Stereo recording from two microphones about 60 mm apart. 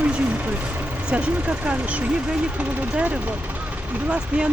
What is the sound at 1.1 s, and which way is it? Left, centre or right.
Speech, centre.